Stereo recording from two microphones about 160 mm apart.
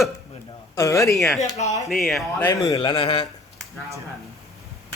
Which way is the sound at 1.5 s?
45° left (ahead or behind).